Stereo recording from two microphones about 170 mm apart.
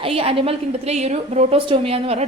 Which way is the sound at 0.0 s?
35° right (ahead or behind).